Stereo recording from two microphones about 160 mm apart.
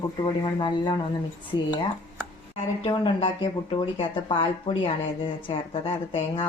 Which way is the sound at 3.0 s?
35° left (ahead or behind).